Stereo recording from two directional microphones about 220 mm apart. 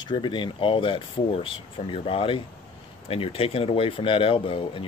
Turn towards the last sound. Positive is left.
turn(degrees=25)  # may be behind; listen again after turning